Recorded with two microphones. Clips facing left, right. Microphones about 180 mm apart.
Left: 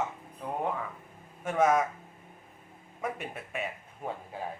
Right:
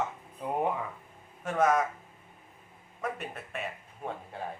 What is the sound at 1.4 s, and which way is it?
Speech, 5° left (ahead or behind).